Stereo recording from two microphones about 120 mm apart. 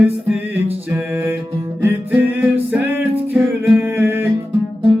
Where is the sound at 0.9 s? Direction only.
15° right (ahead or behind).